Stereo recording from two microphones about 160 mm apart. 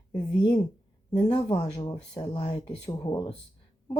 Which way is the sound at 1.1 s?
35° left (ahead or behind).